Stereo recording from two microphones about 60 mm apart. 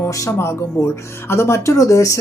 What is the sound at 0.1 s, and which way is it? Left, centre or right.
Speech, left.